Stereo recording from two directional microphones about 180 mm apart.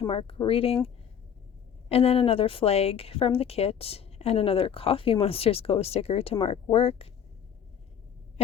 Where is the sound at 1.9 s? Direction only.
35° left (ahead or behind).